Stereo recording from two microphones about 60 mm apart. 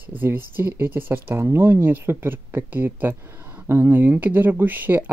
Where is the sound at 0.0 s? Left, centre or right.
Right.